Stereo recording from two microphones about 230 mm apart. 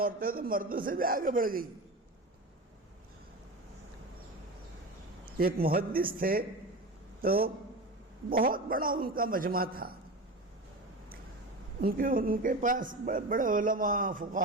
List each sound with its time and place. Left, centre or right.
0.0 s speech: right
5.4 s speech: right
11.8 s speech: right